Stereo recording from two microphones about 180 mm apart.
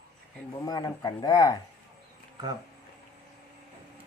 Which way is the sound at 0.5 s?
20° left (ahead or behind).